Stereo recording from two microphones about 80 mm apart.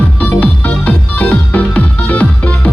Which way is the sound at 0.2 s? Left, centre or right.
Centre.